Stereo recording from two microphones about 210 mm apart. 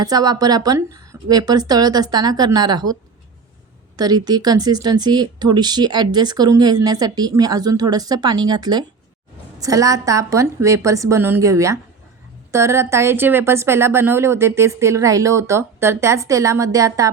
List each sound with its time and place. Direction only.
0.0 s speech: 20° right (ahead or behind)